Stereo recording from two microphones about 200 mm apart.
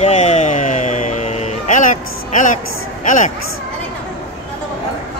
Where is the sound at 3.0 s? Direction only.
40° left (ahead or behind).